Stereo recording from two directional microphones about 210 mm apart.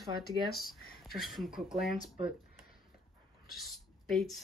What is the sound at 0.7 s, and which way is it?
Speech, centre (ahead or behind).